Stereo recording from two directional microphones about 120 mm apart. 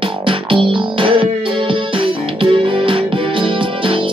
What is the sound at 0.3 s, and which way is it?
Music, 45° right (ahead or behind).